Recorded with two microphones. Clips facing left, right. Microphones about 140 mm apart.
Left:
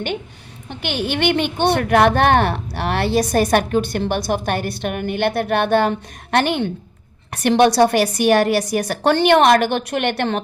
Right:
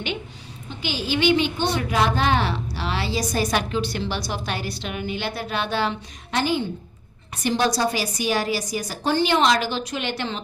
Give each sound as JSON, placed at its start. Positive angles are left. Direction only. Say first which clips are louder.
{"t": 0.7, "sound": "a woman's voice", "louder": "left 3 dB", "side_deg": 65}